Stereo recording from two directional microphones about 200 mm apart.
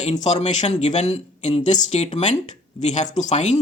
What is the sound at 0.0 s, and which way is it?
Speech, 35° left (ahead or behind).